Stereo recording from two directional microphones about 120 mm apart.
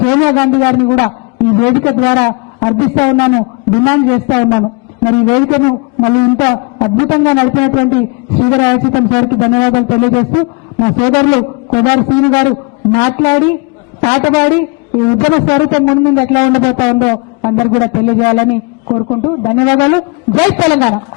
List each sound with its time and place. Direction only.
0.0 s a man's voice: 20° left (ahead or behind)
19.5 s a man's voice: 20° left (ahead or behind)